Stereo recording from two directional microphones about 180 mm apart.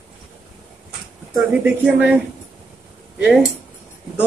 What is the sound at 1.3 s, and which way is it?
Speech, 5° right (ahead or behind).